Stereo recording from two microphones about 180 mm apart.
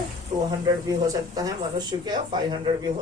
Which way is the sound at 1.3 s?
20° right (ahead or behind).